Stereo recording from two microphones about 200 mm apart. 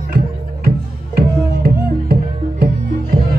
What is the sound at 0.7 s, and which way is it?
Music, 50° right (ahead or behind).